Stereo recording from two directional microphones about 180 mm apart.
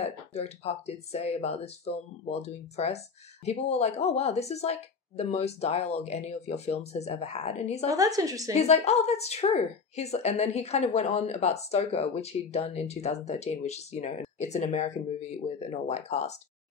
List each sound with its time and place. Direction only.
0.0 s speech: 35° left (ahead or behind)
7.9 s a woman's voice: 20° right (ahead or behind)
8.5 s speech: 35° left (ahead or behind)